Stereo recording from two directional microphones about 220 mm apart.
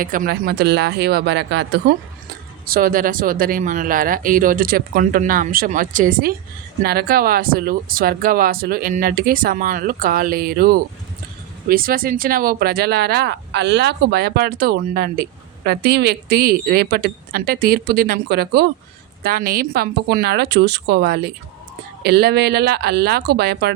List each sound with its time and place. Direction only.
0.0 s speech: 40° right (ahead or behind)
2.6 s speech: 40° right (ahead or behind)